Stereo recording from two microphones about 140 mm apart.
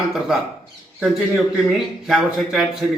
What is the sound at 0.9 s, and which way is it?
A man's voice, 5° right (ahead or behind).